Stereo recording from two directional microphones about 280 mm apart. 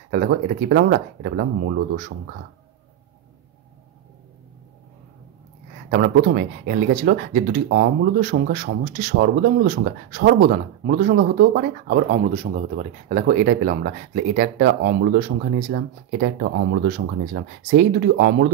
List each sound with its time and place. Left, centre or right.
0.1 s speech: right
5.9 s speech: right